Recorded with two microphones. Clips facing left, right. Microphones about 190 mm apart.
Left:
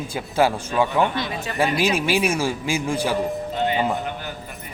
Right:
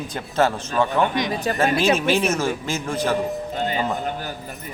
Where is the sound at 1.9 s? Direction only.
10° left (ahead or behind).